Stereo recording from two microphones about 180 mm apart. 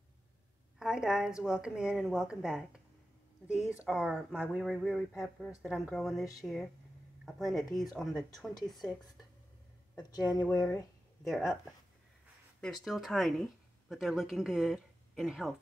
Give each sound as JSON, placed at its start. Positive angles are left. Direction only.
{"t": 0.7, "sound": "speech", "side_deg": -5}
{"t": 9.9, "sound": "speech", "side_deg": 20}
{"t": 11.2, "sound": "speech", "side_deg": 0}